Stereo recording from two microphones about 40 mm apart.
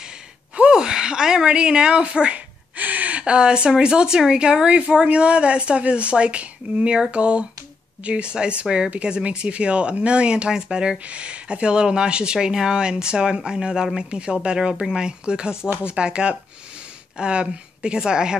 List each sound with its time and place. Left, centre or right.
0.6 s speech: right
2.7 s speech: right; by 18.4 s centre